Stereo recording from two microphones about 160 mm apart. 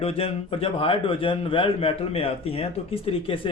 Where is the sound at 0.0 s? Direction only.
35° left (ahead or behind).